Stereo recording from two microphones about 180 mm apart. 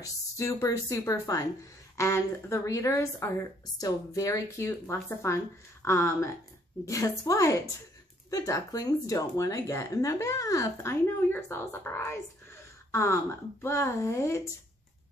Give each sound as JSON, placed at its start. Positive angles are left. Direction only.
{"t": 0.0, "sound": "speech", "side_deg": 15}